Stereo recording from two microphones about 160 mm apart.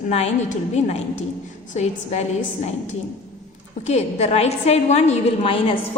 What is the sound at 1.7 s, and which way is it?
A woman's voice, 45° left (ahead or behind).